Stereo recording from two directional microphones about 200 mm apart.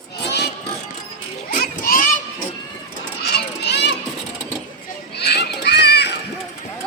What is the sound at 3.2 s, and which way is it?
Children playing, 55° left (ahead or behind).